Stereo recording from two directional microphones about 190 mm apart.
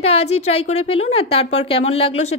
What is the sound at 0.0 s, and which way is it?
A woman's voice, 30° left (ahead or behind).